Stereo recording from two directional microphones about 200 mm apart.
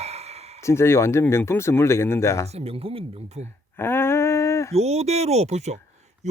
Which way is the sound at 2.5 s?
30° right (ahead or behind).